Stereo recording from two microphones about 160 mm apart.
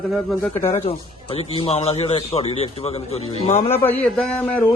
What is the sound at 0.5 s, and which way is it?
Speech, 40° left (ahead or behind).